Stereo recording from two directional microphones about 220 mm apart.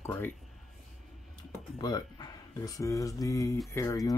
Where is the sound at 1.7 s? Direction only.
20° left (ahead or behind).